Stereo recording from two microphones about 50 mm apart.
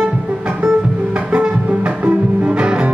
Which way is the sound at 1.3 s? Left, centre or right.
Right.